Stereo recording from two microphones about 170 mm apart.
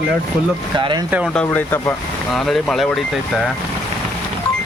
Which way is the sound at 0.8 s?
25° right (ahead or behind).